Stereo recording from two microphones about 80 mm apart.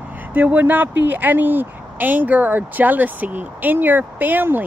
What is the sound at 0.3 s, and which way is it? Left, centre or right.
Speech, right.